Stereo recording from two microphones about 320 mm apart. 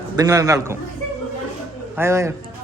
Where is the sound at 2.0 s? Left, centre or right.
Centre.